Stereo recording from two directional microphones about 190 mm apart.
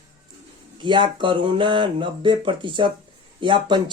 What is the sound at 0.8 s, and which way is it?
Speech, 25° right (ahead or behind).